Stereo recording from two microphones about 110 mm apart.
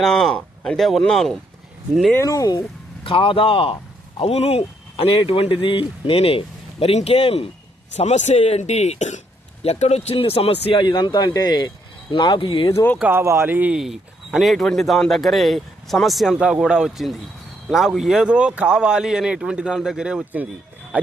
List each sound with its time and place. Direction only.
0.0 s speech: 5° left (ahead or behind)
2.1 s speech: 30° left (ahead or behind)
3.0 s speech: 50° left (ahead or behind)
4.2 s speech: 65° left (ahead or behind)
7.9 s speech: 90° left; by 10.8 s 60° left (ahead or behind)
10.8 s speech: 40° left (ahead or behind)
12.7 s speech: 20° left (ahead or behind)
13.0 s speech: 20° right (ahead or behind)
13.7 s speech: centre (ahead or behind)